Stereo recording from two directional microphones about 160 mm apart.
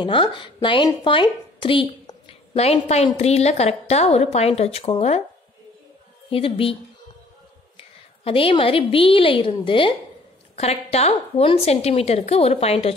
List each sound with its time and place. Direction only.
0.0 s a woman's voice: 30° left (ahead or behind)
6.3 s a woman's voice: 35° left (ahead or behind)
8.2 s a woman's voice: 35° left (ahead or behind)